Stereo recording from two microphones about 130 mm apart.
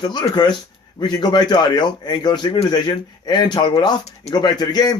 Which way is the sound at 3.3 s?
35° left (ahead or behind).